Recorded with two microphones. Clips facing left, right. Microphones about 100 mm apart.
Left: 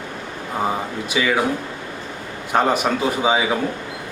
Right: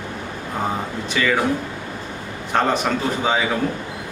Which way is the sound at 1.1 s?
10° left (ahead or behind).